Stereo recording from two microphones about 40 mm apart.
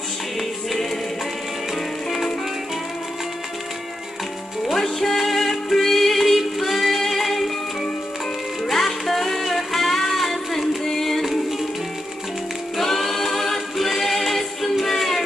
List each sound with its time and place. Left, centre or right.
0.4 s music: centre
2.0 s music: centre
4.7 s music: centre
8.6 s music: centre
12.7 s a capella: centre